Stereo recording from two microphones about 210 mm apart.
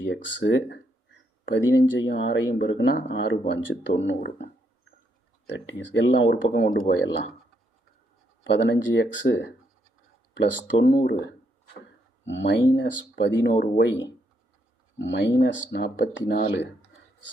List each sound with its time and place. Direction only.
0.0 s speech: 60° left (ahead or behind)
5.5 s speech: 60° left (ahead or behind)
6.5 s speech: 40° left (ahead or behind)
8.4 s speech: 55° left (ahead or behind)
12.2 s speech: 60° left (ahead or behind)